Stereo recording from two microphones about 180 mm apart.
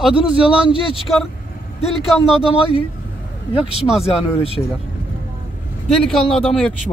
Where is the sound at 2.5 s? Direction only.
30° left (ahead or behind).